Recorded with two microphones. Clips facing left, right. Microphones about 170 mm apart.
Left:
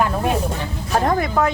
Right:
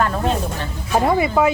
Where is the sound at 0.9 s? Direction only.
5° right (ahead or behind).